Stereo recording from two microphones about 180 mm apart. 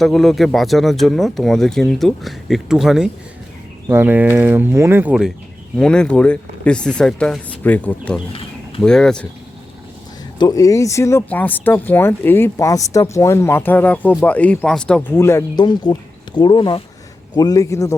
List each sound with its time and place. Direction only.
0.0 s speech: centre (ahead or behind)
5.7 s speech: 5° left (ahead or behind)
8.3 s a sound: 30° left (ahead or behind)
8.8 s speech: 5° left (ahead or behind)
10.3 s speech: 20° left (ahead or behind)